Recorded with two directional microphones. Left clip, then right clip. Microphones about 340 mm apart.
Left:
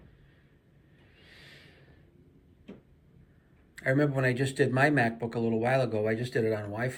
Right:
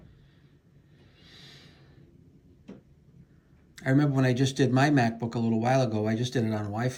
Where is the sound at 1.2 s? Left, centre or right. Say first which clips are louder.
Right 2 dB; right.